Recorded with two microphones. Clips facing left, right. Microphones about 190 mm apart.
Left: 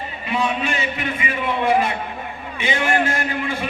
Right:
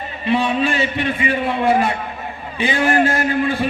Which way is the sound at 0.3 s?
30° right (ahead or behind).